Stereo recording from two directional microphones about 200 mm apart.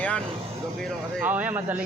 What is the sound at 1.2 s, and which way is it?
Speech, 10° right (ahead or behind).